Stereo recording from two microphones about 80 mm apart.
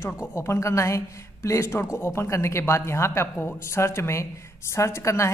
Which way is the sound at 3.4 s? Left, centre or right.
Left.